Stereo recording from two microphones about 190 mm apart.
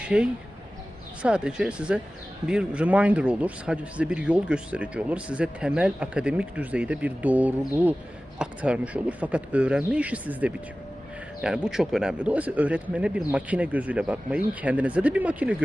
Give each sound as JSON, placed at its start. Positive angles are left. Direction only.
{"t": 0.0, "sound": "a man's voice", "side_deg": -5}